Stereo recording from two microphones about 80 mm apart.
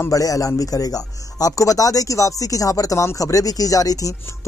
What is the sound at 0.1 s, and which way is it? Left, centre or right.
Speech, left.